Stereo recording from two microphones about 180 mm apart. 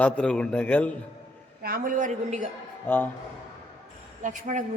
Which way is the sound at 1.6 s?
50° right (ahead or behind).